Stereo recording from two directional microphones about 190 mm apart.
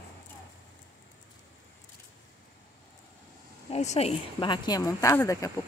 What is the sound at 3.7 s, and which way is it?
Speech, 35° left (ahead or behind).